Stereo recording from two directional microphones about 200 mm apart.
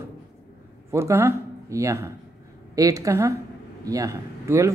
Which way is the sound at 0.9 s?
15° right (ahead or behind).